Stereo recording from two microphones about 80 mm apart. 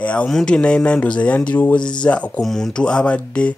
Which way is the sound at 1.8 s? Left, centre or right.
Left.